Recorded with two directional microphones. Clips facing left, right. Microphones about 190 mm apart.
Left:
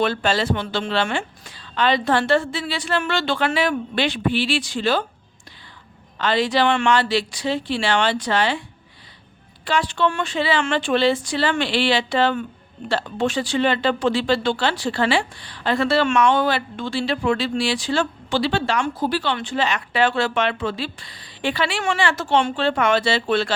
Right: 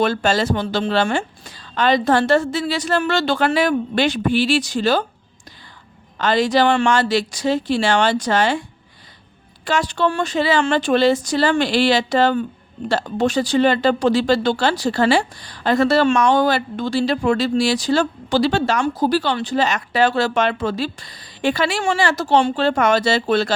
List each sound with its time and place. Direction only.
0.0 s speech: 45° right (ahead or behind)
6.1 s speech: 45° right (ahead or behind)
9.6 s speech: 45° right (ahead or behind)